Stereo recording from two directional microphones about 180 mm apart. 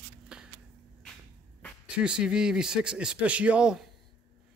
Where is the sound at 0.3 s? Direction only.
5° right (ahead or behind).